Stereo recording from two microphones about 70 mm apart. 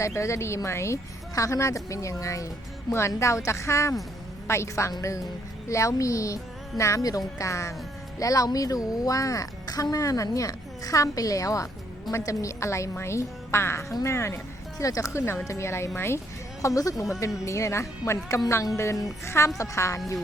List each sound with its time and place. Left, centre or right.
0.0 s speech: left
4.9 s a woman's voice: left
14.8 s speech: left
16.6 s a woman's voice: left
19.2 s speech: left